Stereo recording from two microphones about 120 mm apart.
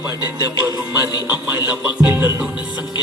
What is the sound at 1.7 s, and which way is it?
Speech, 10° right (ahead or behind).